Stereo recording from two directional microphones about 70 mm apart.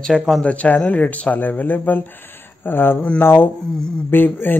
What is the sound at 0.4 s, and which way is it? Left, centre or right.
Speech, centre.